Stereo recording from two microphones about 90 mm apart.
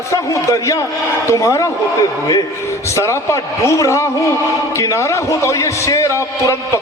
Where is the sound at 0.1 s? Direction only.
35° left (ahead or behind).